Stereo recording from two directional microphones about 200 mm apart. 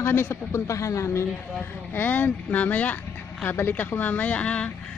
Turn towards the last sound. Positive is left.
turn(degrees=5)  # may be behind; listen again after turning